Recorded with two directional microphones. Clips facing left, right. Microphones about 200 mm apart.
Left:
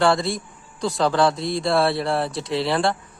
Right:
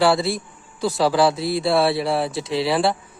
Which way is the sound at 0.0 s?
5° right (ahead or behind).